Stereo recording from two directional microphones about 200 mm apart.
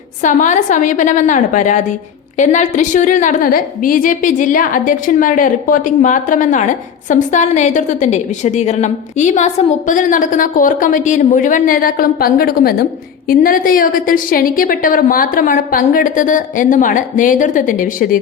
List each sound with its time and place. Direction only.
0.2 s a woman's voice: 40° left (ahead or behind)